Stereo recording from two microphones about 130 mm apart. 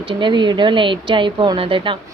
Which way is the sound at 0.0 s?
40° right (ahead or behind).